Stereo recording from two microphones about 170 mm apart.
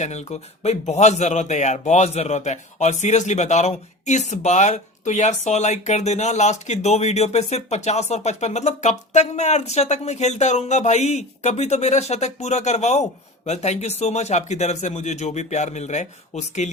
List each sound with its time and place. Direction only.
0.0 s a man's voice: 40° left (ahead or behind)